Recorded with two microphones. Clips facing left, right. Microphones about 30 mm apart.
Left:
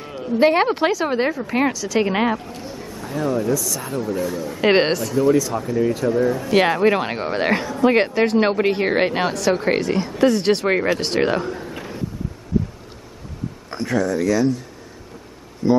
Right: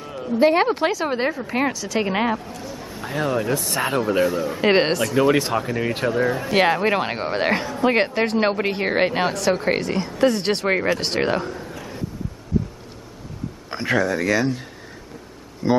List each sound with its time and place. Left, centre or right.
0.1 s a sound: centre
0.4 s a woman's voice: centre
2.0 s a woman's voice: centre
2.5 s a sound: left
3.1 s speech: right
4.3 s speech: right
4.6 s a woman's voice: centre
5.1 s speech: right
6.5 s a woman's voice: centre
11.6 s a sound: left
13.8 s speech: right
15.6 s speech: centre